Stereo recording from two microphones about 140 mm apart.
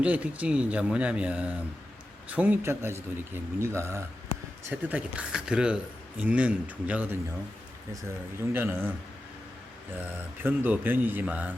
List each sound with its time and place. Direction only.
0.0 s speech: 10° right (ahead or behind)
8.5 s speech: 15° right (ahead or behind)
10.0 s speech: 15° right (ahead or behind)